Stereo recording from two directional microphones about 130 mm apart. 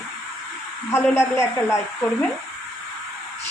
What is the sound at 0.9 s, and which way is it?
Speech, 20° left (ahead or behind).